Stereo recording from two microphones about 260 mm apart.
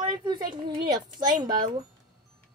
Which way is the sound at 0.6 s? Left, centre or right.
Centre.